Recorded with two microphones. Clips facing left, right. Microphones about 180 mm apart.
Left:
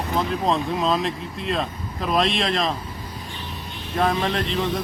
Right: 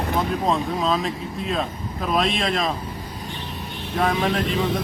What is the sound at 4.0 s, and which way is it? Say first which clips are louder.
Speech: even; centre (ahead or behind).